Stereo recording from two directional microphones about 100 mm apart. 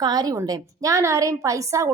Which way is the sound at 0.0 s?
40° right (ahead or behind).